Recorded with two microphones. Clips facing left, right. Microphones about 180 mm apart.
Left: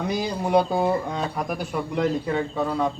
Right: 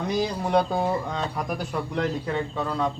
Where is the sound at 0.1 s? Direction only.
5° left (ahead or behind).